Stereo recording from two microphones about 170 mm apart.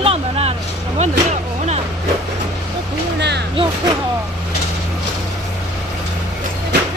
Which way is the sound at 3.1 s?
85° right.